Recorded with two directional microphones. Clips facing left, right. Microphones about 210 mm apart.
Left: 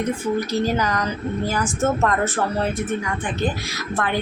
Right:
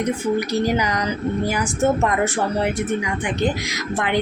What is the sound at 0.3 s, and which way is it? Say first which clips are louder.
Speech: right 1 dB; 15° right (ahead or behind).